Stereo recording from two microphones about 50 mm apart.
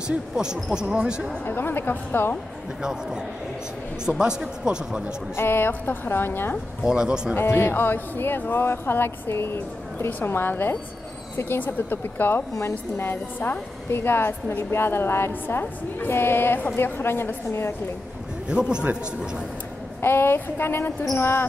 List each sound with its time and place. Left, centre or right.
0.1 s speech: centre
1.4 s speech: left
2.8 s speech: centre
5.3 s speech: left
6.8 s speech: centre
7.3 s speech: left
12.5 s speech: left
13.8 s speech: left
18.5 s speech: centre
20.0 s speech: left
21.2 s basketball bounce: left